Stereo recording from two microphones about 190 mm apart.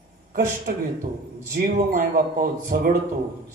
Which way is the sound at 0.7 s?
50° right (ahead or behind).